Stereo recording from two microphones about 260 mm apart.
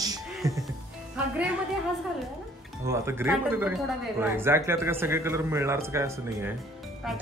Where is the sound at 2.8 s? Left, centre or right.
Centre.